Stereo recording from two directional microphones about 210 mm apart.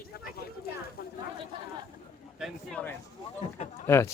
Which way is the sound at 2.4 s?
5° left (ahead or behind).